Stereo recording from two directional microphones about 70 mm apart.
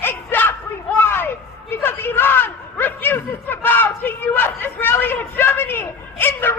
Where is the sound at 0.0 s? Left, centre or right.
Left.